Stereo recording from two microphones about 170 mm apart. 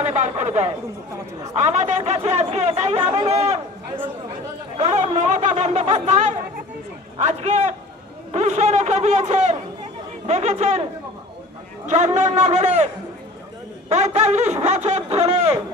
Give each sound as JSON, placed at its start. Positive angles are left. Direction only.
{"t": 0.0, "sound": "speech", "side_deg": -40}
{"t": 11.9, "sound": "a man's voice", "side_deg": -45}